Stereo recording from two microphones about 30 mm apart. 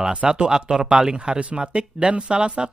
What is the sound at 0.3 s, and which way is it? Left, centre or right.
Speech, right.